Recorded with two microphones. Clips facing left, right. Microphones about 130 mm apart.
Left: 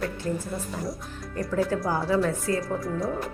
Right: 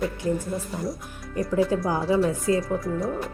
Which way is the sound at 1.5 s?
20° right (ahead or behind).